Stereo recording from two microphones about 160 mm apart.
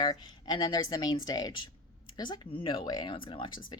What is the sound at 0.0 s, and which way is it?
Speech, 25° left (ahead or behind).